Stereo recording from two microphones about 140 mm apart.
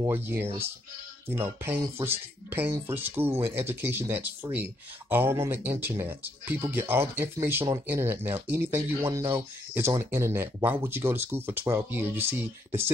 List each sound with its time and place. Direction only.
0.1 s speech: 15° right (ahead or behind)